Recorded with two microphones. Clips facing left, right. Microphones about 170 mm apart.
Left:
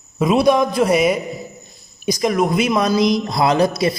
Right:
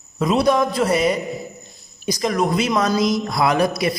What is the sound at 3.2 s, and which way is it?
Speech, 25° left (ahead or behind).